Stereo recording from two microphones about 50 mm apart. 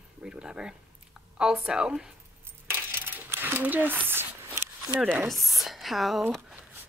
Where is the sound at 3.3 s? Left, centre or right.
Right.